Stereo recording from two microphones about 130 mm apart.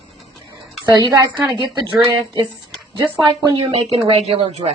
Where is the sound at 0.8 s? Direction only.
35° right (ahead or behind).